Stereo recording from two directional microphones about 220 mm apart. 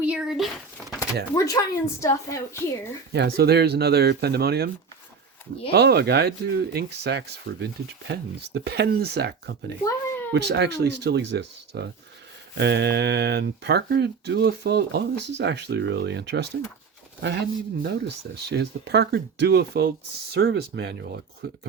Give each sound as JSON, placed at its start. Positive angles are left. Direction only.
{"t": 0.0, "sound": "speech", "side_deg": -5}
{"t": 0.9, "sound": "speech", "side_deg": 15}
{"t": 3.1, "sound": "speech", "side_deg": -45}
{"t": 5.7, "sound": "speech", "side_deg": -45}